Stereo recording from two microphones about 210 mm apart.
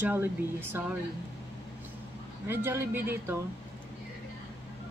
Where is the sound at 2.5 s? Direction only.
10° right (ahead or behind).